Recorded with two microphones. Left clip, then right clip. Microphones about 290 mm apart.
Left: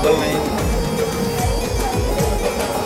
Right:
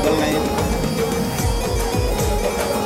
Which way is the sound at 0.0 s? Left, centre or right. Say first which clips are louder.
Left 2 dB; centre.